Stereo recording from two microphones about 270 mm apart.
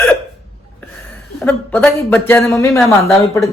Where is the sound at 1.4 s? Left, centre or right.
Centre.